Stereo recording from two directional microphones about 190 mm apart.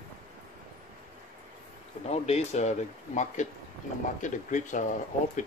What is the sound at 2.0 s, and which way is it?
Speech, 35° left (ahead or behind).